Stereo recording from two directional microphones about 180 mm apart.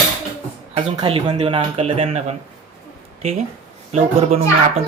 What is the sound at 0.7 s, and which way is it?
Speech, 30° right (ahead or behind).